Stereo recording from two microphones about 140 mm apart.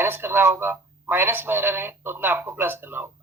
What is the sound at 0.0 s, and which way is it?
Speech, 15° right (ahead or behind).